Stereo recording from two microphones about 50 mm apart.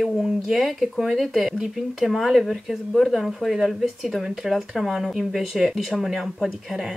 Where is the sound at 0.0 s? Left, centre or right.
Centre.